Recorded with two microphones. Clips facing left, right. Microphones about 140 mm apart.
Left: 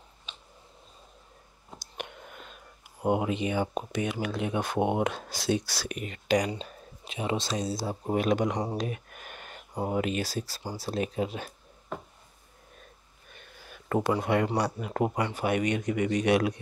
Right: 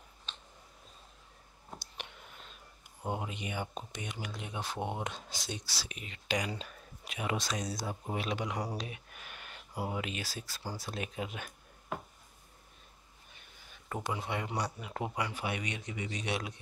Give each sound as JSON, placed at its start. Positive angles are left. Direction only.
{"t": 1.8, "sound": "whispering", "side_deg": 50}
{"t": 3.1, "sound": "speech", "side_deg": 90}
{"t": 3.6, "sound": "speech", "side_deg": 80}
{"t": 8.7, "sound": "a sound", "side_deg": 45}
{"t": 9.8, "sound": "speech", "side_deg": 40}
{"t": 13.3, "sound": "a sound", "side_deg": 75}
{"t": 14.1, "sound": "speech", "side_deg": 60}
{"t": 14.6, "sound": "a man's voice", "side_deg": 50}